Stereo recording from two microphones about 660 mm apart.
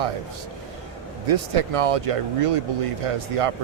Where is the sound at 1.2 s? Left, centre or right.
Right.